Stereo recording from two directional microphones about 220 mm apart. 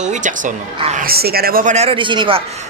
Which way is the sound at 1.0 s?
45° right (ahead or behind).